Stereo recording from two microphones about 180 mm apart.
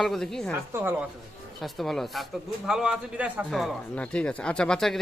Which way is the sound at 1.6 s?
Centre (ahead or behind).